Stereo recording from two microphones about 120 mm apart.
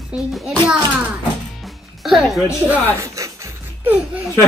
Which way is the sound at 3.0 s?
25° right (ahead or behind).